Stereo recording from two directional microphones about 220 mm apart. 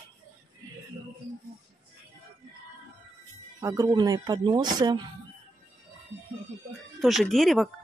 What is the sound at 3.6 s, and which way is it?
Speech, 15° right (ahead or behind).